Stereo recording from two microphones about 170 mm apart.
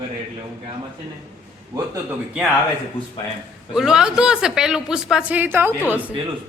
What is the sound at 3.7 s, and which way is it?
A woman's voice, 5° right (ahead or behind).